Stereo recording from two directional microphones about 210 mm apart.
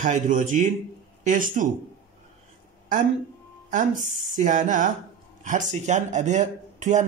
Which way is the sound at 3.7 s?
40° right (ahead or behind).